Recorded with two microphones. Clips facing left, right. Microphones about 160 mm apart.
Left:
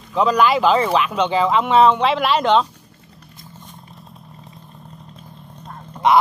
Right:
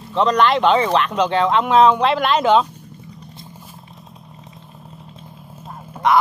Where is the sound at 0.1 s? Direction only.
5° left (ahead or behind).